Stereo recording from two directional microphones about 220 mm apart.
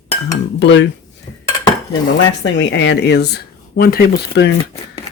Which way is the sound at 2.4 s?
55° left (ahead or behind).